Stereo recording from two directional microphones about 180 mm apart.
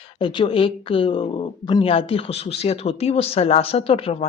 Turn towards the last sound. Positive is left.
turn(degrees=30)  # may be behind; listen again after turning